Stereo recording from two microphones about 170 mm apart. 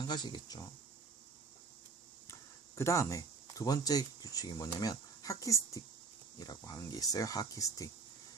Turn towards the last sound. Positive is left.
turn(degrees=20)  # may be behind; listen again after turning